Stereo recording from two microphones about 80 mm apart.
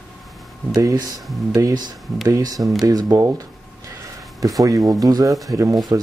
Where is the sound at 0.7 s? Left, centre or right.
Right.